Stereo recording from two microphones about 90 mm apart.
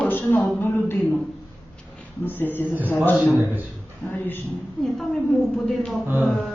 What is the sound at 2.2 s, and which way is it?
Speech, 20° left (ahead or behind).